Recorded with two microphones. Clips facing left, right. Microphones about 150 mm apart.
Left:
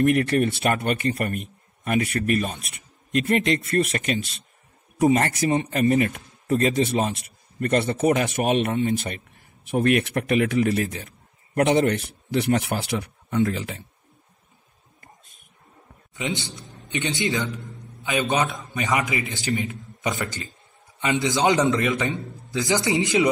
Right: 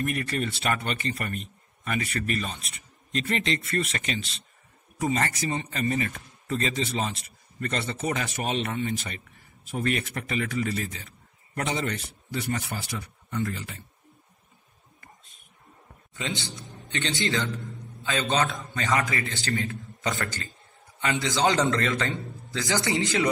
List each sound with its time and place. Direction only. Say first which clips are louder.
0.0 s a man's voice: left 9 dB; 65° left (ahead or behind); by 13.8 s 85° left
16.2 s a man's voice: left 4 dB; 20° left (ahead or behind)